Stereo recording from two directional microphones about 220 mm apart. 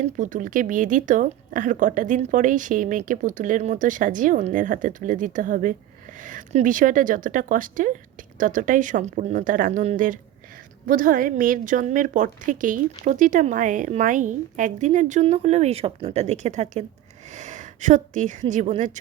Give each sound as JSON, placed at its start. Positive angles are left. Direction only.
{"t": 0.2, "sound": "a woman's voice", "side_deg": -35}